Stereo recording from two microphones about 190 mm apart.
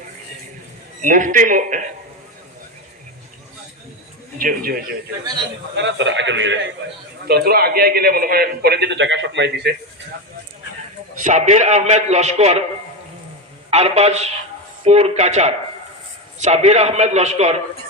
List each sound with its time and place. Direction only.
1.0 s speech: 40° right (ahead or behind)
4.4 s speech: 50° right (ahead or behind)
5.7 s a man's voice: 70° right (ahead or behind)
7.3 s a man's voice: 55° right (ahead or behind)
11.2 s a man's voice: 40° right (ahead or behind)
13.7 s a man's voice: 35° right (ahead or behind)